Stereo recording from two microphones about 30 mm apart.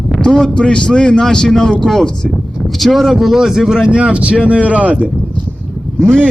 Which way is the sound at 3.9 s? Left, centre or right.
Right.